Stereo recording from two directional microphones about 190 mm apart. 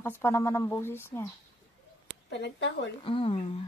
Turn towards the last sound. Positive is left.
turn(degrees=30)  # may be behind; listen again after turning